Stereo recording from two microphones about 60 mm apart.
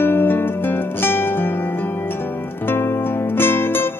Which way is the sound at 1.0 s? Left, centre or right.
Left.